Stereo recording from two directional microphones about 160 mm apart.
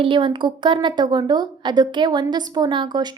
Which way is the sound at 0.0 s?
30° right (ahead or behind).